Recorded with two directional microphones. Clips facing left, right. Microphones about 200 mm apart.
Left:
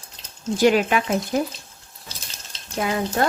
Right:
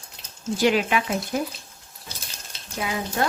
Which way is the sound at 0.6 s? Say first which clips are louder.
Left 3 dB; 45° left (ahead or behind).